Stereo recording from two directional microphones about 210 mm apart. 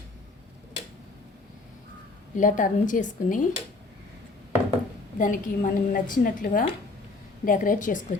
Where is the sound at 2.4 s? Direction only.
40° left (ahead or behind).